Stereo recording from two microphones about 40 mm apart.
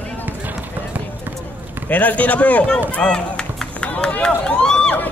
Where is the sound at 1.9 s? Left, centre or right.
Left.